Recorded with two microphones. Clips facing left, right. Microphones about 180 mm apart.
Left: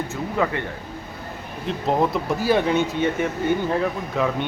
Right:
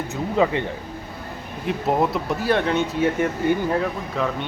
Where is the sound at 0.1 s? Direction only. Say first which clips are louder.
Right 7 dB; 20° right (ahead or behind).